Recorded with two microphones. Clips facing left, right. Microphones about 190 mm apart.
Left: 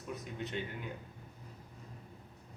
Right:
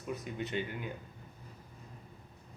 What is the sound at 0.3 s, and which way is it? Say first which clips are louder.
Speech: right 3 dB; 5° right (ahead or behind).